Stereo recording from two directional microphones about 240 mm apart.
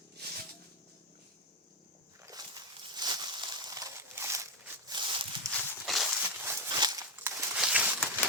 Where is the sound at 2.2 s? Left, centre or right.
Centre.